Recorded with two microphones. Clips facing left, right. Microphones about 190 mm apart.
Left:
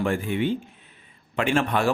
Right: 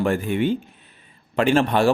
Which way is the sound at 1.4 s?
35° right (ahead or behind).